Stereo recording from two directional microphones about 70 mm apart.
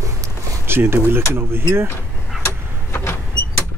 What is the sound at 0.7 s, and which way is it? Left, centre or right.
Speech, right.